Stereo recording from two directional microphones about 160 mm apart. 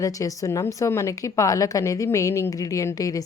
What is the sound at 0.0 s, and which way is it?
A woman's voice, 20° left (ahead or behind).